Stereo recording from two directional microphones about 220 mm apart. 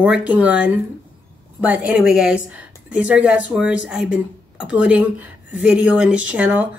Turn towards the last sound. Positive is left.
turn(degrees=-5)  # may be behind; listen again after turning